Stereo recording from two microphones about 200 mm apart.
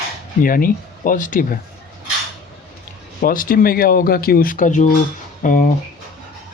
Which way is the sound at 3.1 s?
45° left (ahead or behind).